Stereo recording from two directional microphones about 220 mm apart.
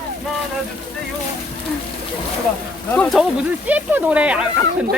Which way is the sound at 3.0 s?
Centre (ahead or behind).